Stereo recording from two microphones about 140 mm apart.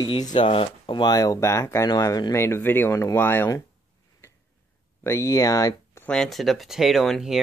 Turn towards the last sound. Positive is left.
turn(degrees=0)  # may be behind; listen again after turning